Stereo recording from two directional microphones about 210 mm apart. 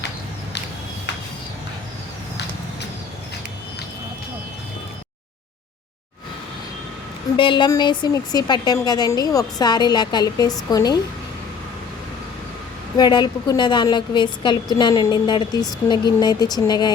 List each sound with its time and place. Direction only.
7.3 s a woman's voice: 25° left (ahead or behind)
13.0 s a woman's voice: 20° left (ahead or behind)